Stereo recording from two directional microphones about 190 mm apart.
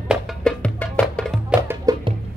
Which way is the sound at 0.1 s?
5° left (ahead or behind).